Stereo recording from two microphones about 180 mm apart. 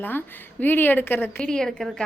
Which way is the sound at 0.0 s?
10° left (ahead or behind).